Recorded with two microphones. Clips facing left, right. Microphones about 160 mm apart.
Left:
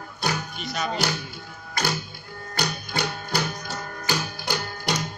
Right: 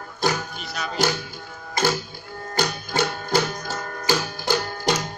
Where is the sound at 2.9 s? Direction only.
40° right (ahead or behind).